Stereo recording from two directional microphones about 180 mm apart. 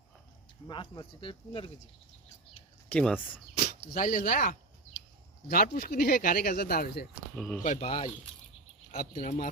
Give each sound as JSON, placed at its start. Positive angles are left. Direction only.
{"t": 0.7, "sound": "speech", "side_deg": 25}
{"t": 2.9, "sound": "speech", "side_deg": 5}
{"t": 3.9, "sound": "speech", "side_deg": 50}
{"t": 7.3, "sound": "speech", "side_deg": 5}
{"t": 7.6, "sound": "speech", "side_deg": 40}
{"t": 8.9, "sound": "speech", "side_deg": 45}